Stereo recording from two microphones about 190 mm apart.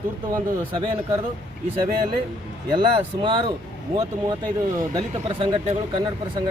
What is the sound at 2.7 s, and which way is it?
A man's voice, 25° right (ahead or behind).